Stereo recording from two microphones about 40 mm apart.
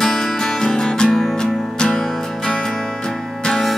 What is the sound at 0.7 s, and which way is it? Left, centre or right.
Music, centre.